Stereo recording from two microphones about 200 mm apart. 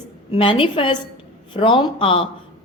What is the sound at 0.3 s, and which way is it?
A woman's voice, 25° left (ahead or behind).